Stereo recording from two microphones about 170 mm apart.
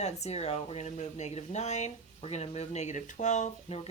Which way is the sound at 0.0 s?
40° left (ahead or behind).